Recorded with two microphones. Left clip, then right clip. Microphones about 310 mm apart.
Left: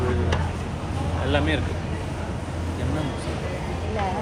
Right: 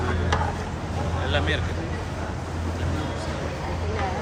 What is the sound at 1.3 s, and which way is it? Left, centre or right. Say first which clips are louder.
Vehicle: left 2 dB; centre.